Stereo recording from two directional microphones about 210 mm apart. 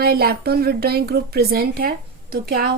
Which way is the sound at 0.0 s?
45° right (ahead or behind).